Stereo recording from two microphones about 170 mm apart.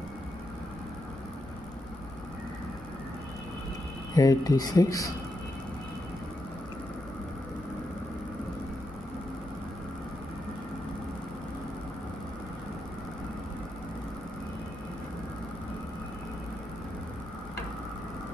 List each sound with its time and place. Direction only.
4.1 s speech: 20° left (ahead or behind)